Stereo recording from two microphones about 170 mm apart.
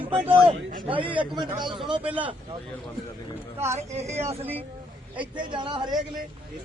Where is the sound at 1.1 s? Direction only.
25° right (ahead or behind).